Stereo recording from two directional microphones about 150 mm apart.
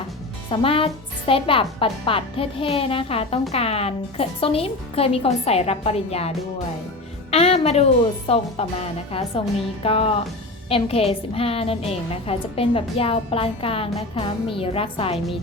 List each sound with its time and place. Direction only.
0.5 s a woman's voice: 40° left (ahead or behind)
7.3 s music: 40° left (ahead or behind)
8.3 s a woman's voice: 40° left (ahead or behind)